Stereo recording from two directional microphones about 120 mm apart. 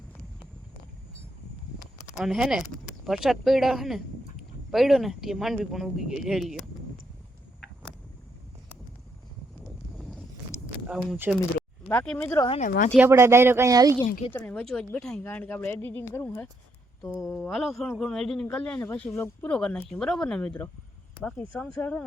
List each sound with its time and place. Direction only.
2.1 s a man's voice: 5° right (ahead or behind)
10.0 s a sound: centre (ahead or behind)
10.8 s speech: 5° right (ahead or behind)
11.9 s speech: 15° left (ahead or behind)
12.5 s speech: 90° left
13.0 s speech: 20° right (ahead or behind)
14.3 s speech: 10° left (ahead or behind)
17.2 s a man's voice: centre (ahead or behind)